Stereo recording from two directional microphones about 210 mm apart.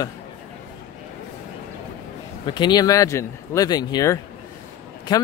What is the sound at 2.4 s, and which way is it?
Speech, 20° left (ahead or behind).